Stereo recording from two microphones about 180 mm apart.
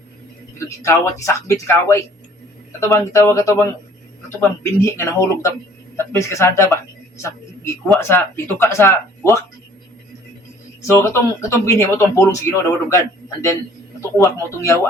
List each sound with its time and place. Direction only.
0.6 s speech: 15° left (ahead or behind)
7.2 s a sound: 15° left (ahead or behind)
7.9 s speech: 15° left (ahead or behind)
10.8 s speech: 15° left (ahead or behind)
14.2 s speech: 15° left (ahead or behind)